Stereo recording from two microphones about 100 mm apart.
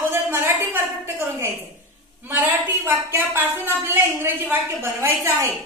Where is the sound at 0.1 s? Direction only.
25° right (ahead or behind).